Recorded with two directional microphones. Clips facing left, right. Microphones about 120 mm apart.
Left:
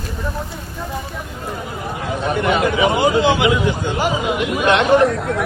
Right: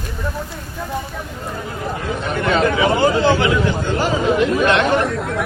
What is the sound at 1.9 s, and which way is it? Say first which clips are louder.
A man's voice: left 2 dB; 25° left (ahead or behind).